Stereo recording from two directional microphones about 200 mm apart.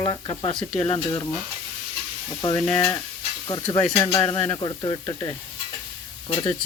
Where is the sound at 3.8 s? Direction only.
10° left (ahead or behind).